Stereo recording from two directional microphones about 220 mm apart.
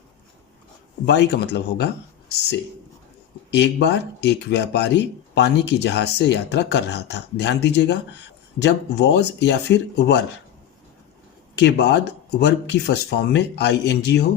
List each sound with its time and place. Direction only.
1.0 s speech: 50° left (ahead or behind)
3.5 s speech: 50° left (ahead or behind)
11.5 s speech: 50° left (ahead or behind)